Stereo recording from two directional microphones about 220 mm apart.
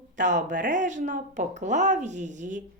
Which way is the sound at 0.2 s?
35° right (ahead or behind).